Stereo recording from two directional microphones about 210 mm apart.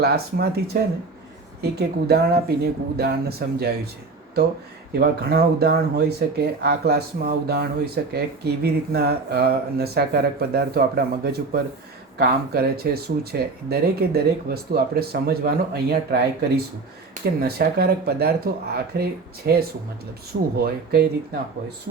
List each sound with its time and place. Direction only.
0.0 s speech: 50° right (ahead or behind)
4.9 s speech: 50° right (ahead or behind)